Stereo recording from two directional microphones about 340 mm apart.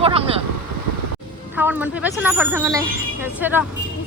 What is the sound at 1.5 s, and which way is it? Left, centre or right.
Speech, centre.